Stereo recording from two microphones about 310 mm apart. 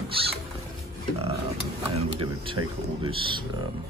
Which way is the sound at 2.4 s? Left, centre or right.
Centre.